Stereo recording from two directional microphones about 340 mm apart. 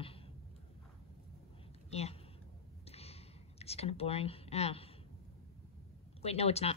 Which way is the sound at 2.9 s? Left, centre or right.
Centre.